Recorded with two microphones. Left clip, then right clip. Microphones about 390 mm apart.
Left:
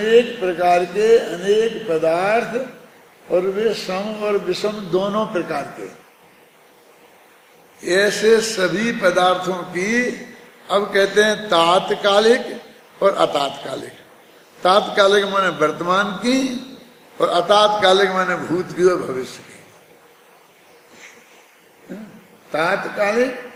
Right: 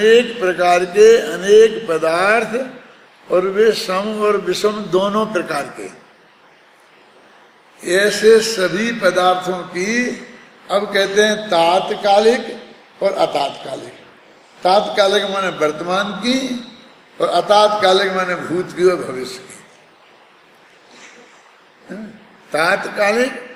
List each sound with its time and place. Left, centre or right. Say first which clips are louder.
0.0 s a sound: right 3 dB; centre
7.8 s a man's voice: right 2 dB; centre
22.5 s a man's voice: right 3 dB; centre